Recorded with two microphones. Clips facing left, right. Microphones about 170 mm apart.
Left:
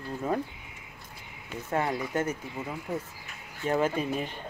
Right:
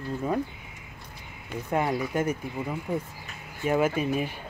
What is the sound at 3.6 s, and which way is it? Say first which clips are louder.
Speech: right 2 dB; 10° right (ahead or behind).